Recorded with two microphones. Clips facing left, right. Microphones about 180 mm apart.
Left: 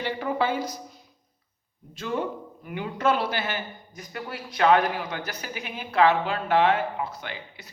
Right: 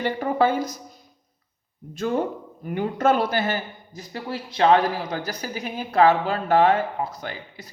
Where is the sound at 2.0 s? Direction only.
45° right (ahead or behind).